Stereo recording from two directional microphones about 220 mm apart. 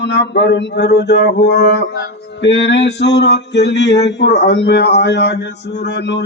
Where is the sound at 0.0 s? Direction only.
50° left (ahead or behind).